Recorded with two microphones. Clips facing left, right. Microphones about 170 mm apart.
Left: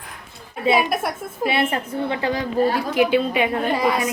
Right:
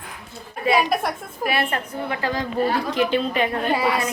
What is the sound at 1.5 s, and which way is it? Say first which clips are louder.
A woman's voice: left 2 dB; 25° left (ahead or behind).